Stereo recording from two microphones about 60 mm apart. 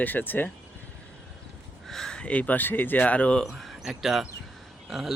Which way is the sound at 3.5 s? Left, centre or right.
Centre.